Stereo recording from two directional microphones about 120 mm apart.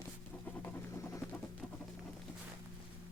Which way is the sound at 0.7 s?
25° left (ahead or behind).